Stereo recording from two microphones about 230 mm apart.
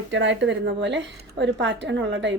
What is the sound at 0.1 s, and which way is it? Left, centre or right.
Speech, right.